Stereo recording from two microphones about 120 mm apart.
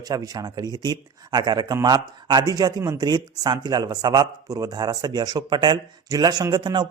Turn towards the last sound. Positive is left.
turn(degrees=-40)  # may be behind; listen again after turning